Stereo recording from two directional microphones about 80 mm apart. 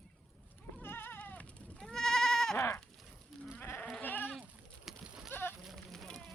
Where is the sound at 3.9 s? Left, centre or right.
Left.